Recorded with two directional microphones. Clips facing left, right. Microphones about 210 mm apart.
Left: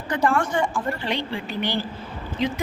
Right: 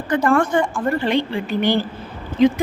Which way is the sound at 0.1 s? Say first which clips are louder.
Right 5 dB; 55° right (ahead or behind).